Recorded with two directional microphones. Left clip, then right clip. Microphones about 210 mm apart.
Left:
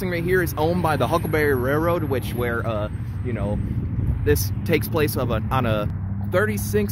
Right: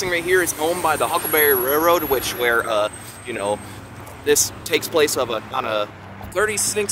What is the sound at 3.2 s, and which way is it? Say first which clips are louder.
Speech: right 6 dB; 30° right (ahead or behind).